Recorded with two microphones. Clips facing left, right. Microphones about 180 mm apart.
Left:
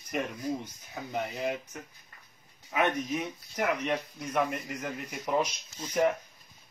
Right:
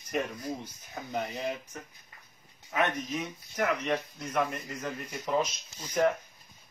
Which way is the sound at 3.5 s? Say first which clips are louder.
Even; 15° left (ahead or behind).